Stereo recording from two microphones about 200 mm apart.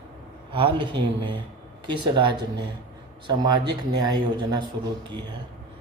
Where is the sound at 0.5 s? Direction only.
25° right (ahead or behind).